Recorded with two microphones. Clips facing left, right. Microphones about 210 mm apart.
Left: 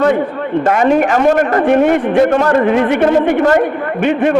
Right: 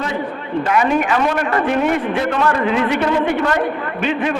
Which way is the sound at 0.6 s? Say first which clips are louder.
Left 5 dB; 45° left (ahead or behind).